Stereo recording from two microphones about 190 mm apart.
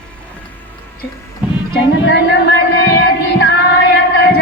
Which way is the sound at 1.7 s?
55° left (ahead or behind).